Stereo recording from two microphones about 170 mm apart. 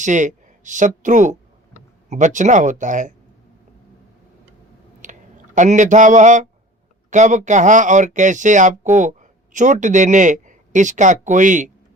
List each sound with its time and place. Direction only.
0.0 s speech: 45° right (ahead or behind)
5.0 s a sound: 45° right (ahead or behind)
5.5 s speech: 45° right (ahead or behind)